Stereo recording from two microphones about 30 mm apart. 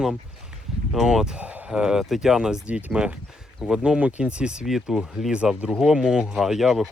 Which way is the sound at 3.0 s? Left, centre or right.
Right.